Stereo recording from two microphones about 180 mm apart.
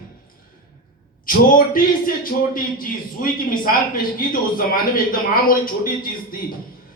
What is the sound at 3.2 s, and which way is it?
A man's voice, 50° left (ahead or behind).